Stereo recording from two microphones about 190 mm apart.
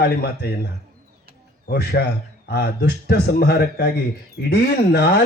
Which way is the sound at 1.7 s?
55° left (ahead or behind).